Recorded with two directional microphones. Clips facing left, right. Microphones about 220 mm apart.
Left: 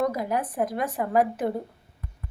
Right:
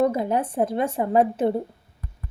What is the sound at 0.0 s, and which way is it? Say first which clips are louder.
A woman's voice: right 4 dB; 25° right (ahead or behind).